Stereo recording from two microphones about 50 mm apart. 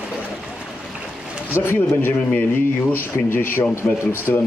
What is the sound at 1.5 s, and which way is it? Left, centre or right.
Speech, left.